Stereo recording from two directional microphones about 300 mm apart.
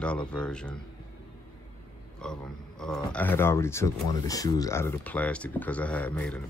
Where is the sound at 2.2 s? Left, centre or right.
Centre.